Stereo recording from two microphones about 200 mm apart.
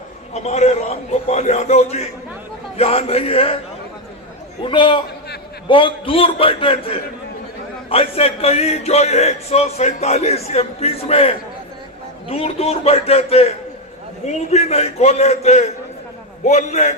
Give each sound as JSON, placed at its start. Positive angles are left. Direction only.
{"t": 0.3, "sound": "a man's voice", "side_deg": 35}
{"t": 4.6, "sound": "a man's voice", "side_deg": 25}